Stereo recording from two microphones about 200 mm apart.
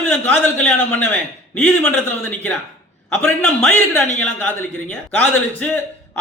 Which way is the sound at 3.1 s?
10° left (ahead or behind).